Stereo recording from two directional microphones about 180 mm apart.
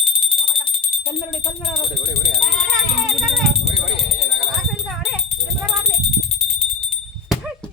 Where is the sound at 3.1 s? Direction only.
Centre (ahead or behind).